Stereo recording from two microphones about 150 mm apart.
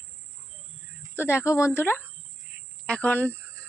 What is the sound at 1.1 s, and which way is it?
Speech, 15° left (ahead or behind).